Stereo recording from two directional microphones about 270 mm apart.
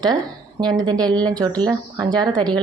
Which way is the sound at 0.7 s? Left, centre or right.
Centre.